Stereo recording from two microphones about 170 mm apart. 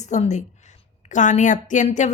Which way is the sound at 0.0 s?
45° left (ahead or behind).